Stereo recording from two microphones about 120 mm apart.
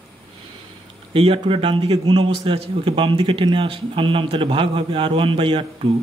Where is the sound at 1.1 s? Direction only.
50° right (ahead or behind).